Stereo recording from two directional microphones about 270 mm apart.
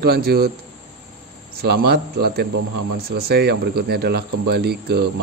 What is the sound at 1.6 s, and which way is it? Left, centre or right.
Speech, right.